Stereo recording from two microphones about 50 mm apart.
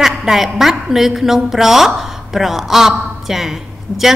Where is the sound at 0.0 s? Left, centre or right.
Centre.